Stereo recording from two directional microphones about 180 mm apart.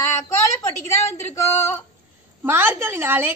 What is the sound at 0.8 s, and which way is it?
Speech, 15° left (ahead or behind).